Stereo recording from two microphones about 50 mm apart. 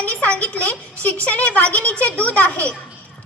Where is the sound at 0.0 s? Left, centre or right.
Left.